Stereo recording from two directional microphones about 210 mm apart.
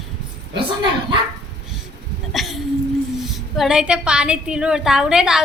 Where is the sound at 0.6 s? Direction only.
20° right (ahead or behind).